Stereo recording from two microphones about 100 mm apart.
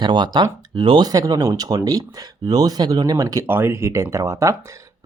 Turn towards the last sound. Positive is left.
turn(degrees=-30)  # may be behind; listen again after turning